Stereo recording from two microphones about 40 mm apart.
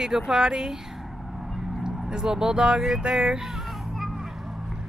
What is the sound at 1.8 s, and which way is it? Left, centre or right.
Speech, centre.